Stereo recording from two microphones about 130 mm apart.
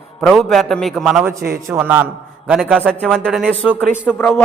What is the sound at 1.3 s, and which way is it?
A man's voice, 20° right (ahead or behind).